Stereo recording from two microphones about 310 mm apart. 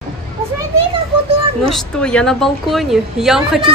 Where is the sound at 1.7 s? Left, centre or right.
Centre.